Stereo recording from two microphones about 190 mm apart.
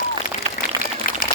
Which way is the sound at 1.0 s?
50° left (ahead or behind).